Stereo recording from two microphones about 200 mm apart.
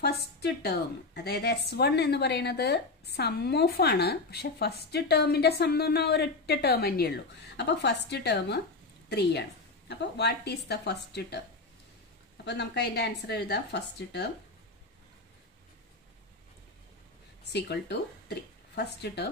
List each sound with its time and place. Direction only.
0.0 s a woman's voice: 55° left (ahead or behind)
12.4 s a woman's voice: 55° left (ahead or behind)
17.5 s speech: 55° left (ahead or behind)